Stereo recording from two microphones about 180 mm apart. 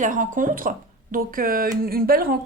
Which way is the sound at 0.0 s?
45° right (ahead or behind).